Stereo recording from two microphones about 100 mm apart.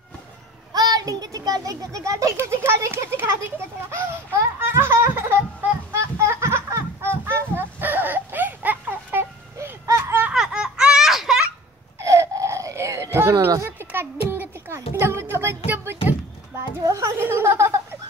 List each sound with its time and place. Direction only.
0.7 s a child's voice: 40° right (ahead or behind); by 5.4 s 25° right (ahead or behind)
5.9 s a sound: 30° right (ahead or behind)
10.3 s baby laughter: 5° right (ahead or behind)
12.0 s baby cry: 30° right (ahead or behind)
13.7 s music: 20° right (ahead or behind)
16.8 s a child's voice: 35° right (ahead or behind)